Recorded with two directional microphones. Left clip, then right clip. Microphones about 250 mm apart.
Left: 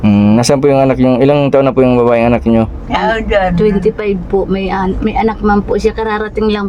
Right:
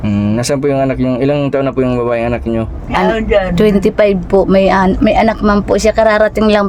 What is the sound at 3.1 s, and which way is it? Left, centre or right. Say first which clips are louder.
Speech: even; centre.